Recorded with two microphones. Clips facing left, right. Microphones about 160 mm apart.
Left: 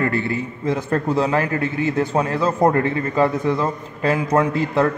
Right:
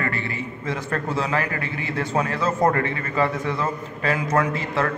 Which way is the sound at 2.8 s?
35° left (ahead or behind).